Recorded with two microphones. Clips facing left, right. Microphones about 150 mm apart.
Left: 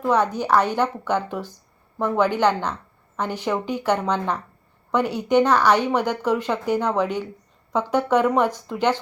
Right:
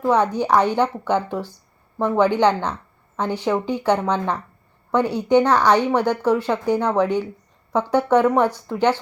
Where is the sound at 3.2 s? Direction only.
10° left (ahead or behind).